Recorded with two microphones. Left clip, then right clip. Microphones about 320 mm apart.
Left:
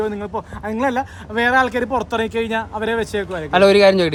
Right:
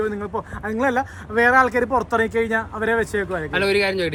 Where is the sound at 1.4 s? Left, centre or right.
Centre.